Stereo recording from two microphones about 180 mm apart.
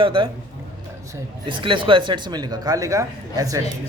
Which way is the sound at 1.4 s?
25° right (ahead or behind).